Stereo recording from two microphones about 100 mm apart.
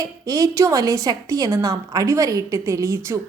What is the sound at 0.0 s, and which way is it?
A woman's voice, 35° right (ahead or behind).